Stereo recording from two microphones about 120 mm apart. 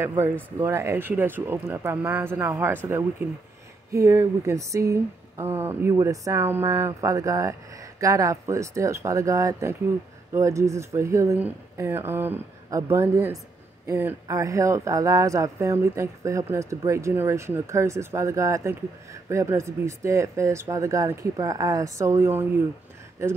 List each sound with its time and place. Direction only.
0.2 s speech: 25° right (ahead or behind)
3.9 s speech: 25° right (ahead or behind)